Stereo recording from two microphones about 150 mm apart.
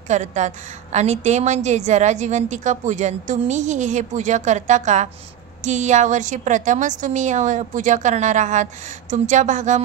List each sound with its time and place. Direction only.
0.1 s a woman's voice: 50° right (ahead or behind)